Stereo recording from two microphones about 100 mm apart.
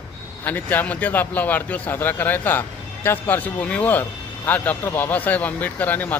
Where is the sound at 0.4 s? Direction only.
20° left (ahead or behind).